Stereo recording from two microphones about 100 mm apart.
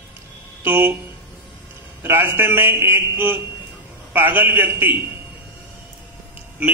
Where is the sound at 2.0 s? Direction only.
25° right (ahead or behind).